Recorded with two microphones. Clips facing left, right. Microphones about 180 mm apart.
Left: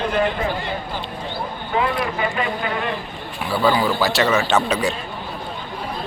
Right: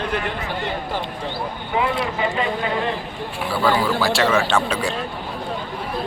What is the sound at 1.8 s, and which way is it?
Speech, 25° right (ahead or behind).